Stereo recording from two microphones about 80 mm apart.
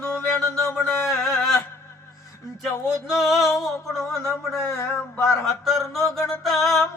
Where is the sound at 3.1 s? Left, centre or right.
Centre.